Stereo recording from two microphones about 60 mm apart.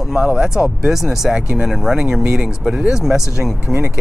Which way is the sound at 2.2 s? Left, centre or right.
Centre.